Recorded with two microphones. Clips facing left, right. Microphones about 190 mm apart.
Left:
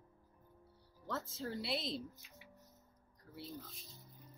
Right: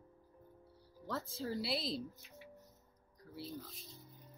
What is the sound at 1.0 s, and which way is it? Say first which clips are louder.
Speech: right 2 dB; centre (ahead or behind).